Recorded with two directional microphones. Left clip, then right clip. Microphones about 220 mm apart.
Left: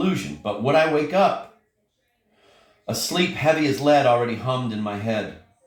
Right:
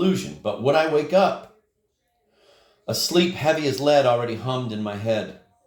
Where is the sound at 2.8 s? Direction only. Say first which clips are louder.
Right 2 dB; 50° right (ahead or behind).